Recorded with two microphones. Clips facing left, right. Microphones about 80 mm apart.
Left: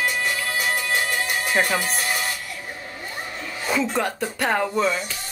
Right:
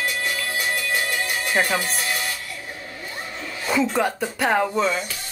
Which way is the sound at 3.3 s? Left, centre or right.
Centre.